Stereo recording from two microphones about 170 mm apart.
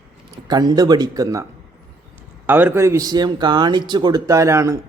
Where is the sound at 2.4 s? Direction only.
10° right (ahead or behind).